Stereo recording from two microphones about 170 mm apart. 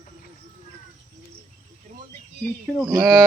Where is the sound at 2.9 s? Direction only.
20° right (ahead or behind).